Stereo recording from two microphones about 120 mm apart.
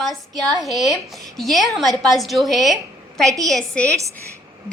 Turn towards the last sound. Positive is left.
turn(degrees=5)  # may be behind; listen again after turning